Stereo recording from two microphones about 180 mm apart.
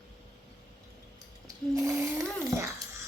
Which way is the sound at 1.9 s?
20° right (ahead or behind).